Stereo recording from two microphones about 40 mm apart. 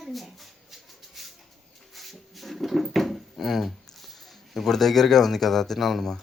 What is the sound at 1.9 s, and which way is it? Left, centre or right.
Drawer open or close, centre.